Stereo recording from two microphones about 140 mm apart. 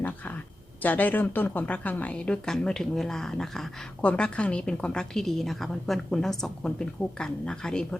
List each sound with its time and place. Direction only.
0.8 s a woman's voice: 10° left (ahead or behind)